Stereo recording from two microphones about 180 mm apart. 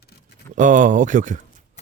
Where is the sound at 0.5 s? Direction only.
45° right (ahead or behind).